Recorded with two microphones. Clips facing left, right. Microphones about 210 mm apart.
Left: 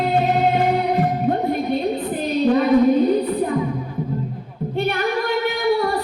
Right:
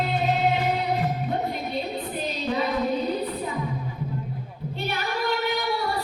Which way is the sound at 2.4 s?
55° left (ahead or behind).